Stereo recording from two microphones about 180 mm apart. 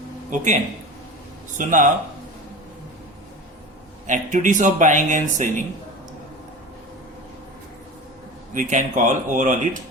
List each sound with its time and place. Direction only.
0.3 s speech: 40° right (ahead or behind)
4.0 s speech: 45° right (ahead or behind)
8.5 s speech: 45° right (ahead or behind)